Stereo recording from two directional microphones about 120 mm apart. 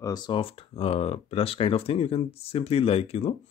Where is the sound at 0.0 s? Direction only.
35° left (ahead or behind).